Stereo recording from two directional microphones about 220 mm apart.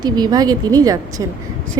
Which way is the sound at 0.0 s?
20° right (ahead or behind).